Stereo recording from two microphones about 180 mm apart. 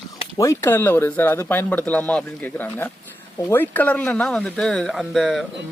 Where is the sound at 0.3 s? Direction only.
20° left (ahead or behind).